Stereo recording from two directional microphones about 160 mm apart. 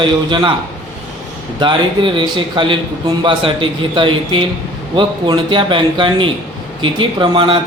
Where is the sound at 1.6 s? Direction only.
30° right (ahead or behind).